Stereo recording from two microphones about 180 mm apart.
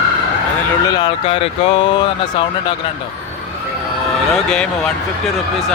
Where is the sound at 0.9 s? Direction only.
30° left (ahead or behind).